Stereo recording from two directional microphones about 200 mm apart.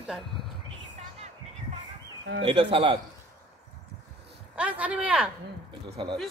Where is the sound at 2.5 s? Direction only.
25° right (ahead or behind).